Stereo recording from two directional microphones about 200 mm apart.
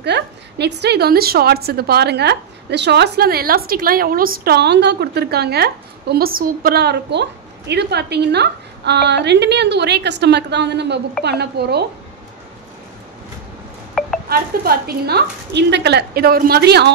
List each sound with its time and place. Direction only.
0.0 s a woman's voice: 55° right (ahead or behind)
14.3 s a woman's voice: 50° right (ahead or behind)